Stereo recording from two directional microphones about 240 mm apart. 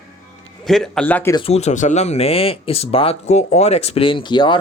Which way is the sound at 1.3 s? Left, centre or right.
Left.